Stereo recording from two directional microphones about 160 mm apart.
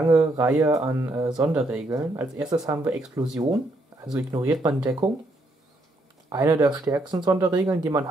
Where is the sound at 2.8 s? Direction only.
5° right (ahead or behind).